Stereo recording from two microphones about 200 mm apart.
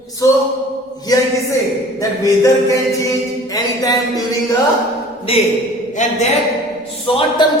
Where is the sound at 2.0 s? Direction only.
15° left (ahead or behind).